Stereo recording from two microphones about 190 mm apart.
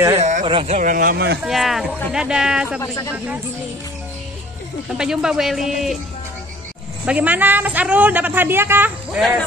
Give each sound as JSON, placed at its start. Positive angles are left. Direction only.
{"t": 0.2, "sound": "speech", "side_deg": -40}
{"t": 1.4, "sound": "speech", "side_deg": 0}
{"t": 2.8, "sound": "speech", "side_deg": 15}
{"t": 4.9, "sound": "speech", "side_deg": -5}
{"t": 7.1, "sound": "a woman's voice", "side_deg": -10}